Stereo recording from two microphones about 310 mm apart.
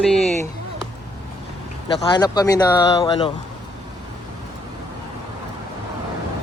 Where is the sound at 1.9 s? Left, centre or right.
Centre.